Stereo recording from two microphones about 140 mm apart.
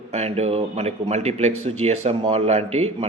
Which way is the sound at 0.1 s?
50° right (ahead or behind).